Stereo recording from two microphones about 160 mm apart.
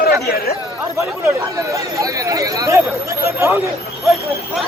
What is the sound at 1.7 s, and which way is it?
Speech, 20° right (ahead or behind).